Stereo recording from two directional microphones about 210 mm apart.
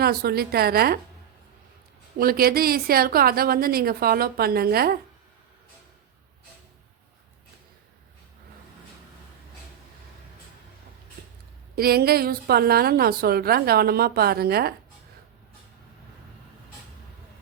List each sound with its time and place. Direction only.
0.0 s a woman's voice: 50° right (ahead or behind)
2.1 s a woman's voice: 45° right (ahead or behind)
11.8 s a woman's voice: 45° right (ahead or behind)